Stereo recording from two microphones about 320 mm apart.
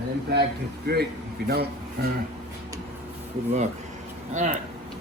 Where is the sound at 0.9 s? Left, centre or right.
Right.